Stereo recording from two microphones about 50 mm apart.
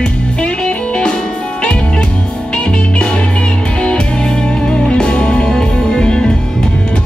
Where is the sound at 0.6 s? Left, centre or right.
Centre.